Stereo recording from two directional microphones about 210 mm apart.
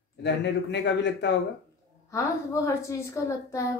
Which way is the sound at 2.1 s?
15° left (ahead or behind).